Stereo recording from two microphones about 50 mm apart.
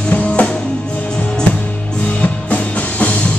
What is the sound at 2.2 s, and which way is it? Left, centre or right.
Music, left.